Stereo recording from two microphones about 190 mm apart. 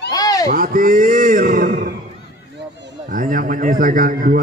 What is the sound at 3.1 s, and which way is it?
A man's voice, 45° right (ahead or behind).